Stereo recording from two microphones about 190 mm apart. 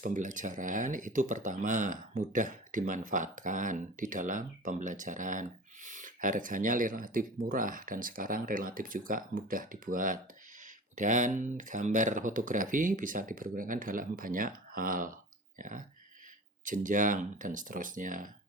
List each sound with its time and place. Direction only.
0.0 s speech: 45° right (ahead or behind)